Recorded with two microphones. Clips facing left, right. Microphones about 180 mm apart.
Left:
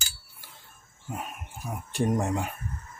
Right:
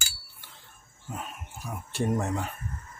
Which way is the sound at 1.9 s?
15° left (ahead or behind).